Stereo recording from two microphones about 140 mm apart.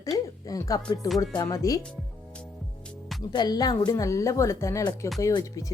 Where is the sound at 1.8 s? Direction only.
5° left (ahead or behind).